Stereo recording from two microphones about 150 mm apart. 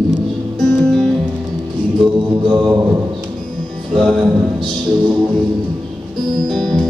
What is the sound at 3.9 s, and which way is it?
Music, centre (ahead or behind).